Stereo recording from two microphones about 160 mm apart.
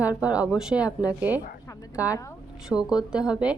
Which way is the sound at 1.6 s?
20° left (ahead or behind).